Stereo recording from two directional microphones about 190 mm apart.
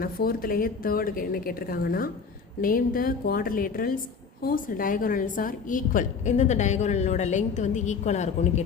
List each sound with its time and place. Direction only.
0.0 s a woman's voice: 50° left (ahead or behind)